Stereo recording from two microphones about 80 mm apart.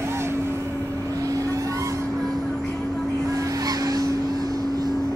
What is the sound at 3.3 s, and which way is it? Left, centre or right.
Goose, right.